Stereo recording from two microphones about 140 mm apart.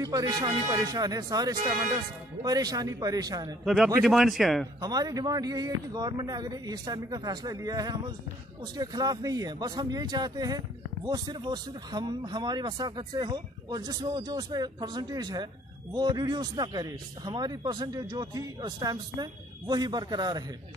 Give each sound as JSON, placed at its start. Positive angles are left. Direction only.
{"t": 0.0, "sound": "speech", "side_deg": -25}
{"t": 3.6, "sound": "speech", "side_deg": 0}
{"t": 4.7, "sound": "speech", "side_deg": -25}